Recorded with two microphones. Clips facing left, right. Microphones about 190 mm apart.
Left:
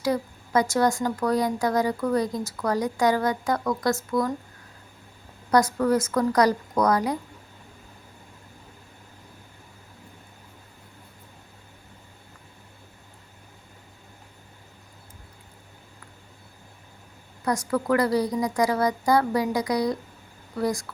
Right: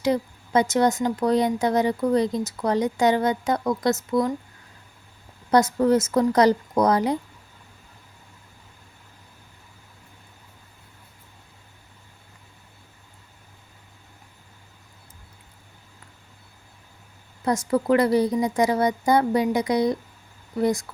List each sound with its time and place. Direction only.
0.0 s speech: 20° right (ahead or behind)
5.5 s speech: 25° right (ahead or behind)
17.4 s speech: 25° right (ahead or behind)